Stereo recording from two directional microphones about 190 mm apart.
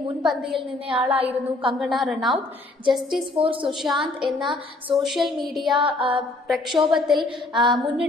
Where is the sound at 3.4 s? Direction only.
25° right (ahead or behind).